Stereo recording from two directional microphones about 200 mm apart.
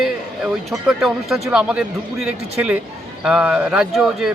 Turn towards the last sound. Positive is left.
turn(degrees=0)  # may be behind; listen again after turning